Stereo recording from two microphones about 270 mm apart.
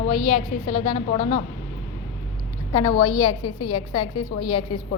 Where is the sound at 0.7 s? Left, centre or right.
Centre.